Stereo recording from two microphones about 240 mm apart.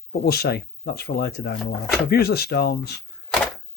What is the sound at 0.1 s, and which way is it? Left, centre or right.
Speech, left.